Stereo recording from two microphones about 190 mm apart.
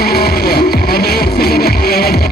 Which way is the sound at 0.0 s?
55° left (ahead or behind).